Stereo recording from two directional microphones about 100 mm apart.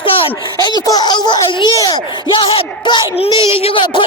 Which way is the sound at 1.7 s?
35° left (ahead or behind).